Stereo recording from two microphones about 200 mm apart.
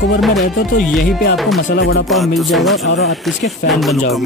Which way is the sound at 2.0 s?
Centre (ahead or behind).